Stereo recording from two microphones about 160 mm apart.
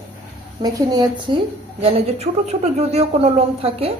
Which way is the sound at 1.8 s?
40° right (ahead or behind).